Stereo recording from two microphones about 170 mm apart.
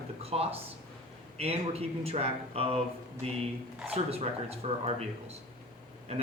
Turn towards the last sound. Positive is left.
turn(degrees=-35)  # may be behind; listen again after turning